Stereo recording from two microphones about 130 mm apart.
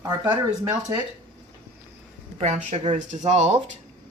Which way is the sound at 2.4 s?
60° right (ahead or behind).